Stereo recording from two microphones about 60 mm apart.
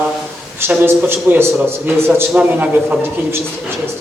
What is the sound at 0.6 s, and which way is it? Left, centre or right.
A man's voice, right.